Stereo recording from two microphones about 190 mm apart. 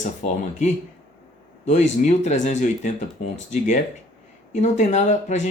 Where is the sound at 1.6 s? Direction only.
35° left (ahead or behind).